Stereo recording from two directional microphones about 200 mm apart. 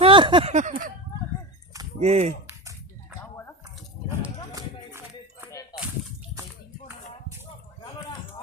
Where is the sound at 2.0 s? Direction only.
30° right (ahead or behind).